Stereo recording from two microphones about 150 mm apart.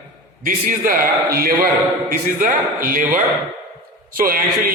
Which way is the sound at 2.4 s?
65° right (ahead or behind).